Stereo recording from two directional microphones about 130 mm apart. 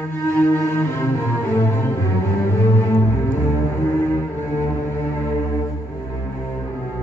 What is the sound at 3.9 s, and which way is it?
Cello, 20° left (ahead or behind).